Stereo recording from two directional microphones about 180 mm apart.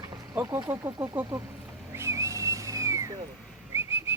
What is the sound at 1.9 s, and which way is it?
Whistling, 15° right (ahead or behind).